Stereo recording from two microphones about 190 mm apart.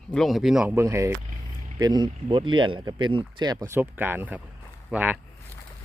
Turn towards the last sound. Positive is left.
turn(degrees=-5)  # may be behind; listen again after turning